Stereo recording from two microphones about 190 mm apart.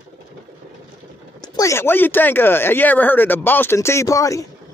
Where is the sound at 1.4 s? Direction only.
15° left (ahead or behind).